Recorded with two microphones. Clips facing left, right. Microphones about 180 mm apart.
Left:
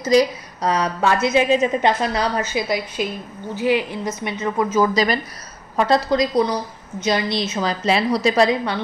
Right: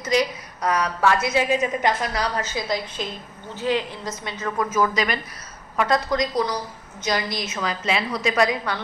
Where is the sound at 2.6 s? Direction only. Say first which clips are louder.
Left 4 dB; 10° left (ahead or behind); by 8.6 s 30° left (ahead or behind).